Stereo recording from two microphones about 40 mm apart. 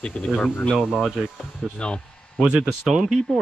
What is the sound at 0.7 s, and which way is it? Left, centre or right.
Speech, centre.